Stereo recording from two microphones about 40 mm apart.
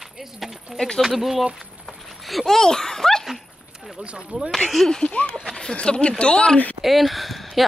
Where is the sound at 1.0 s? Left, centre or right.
Centre.